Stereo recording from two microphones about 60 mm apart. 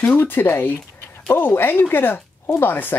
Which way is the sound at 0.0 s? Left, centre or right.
Left.